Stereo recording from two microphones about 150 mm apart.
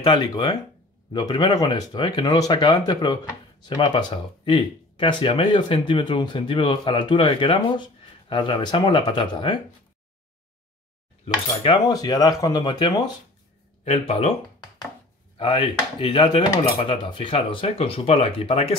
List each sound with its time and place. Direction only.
0.0 s speech: 30° left (ahead or behind)
11.6 s speech: 30° left (ahead or behind)
13.8 s speech: 40° left (ahead or behind)
15.3 s speech: 35° left (ahead or behind)